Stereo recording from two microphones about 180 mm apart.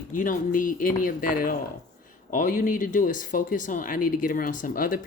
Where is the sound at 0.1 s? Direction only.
50° left (ahead or behind).